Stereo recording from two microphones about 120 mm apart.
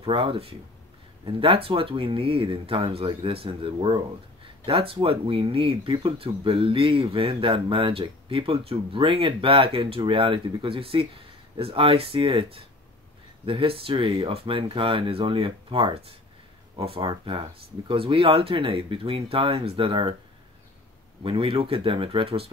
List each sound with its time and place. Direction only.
0.0 s speech: 50° right (ahead or behind)
21.2 s speech: 45° right (ahead or behind)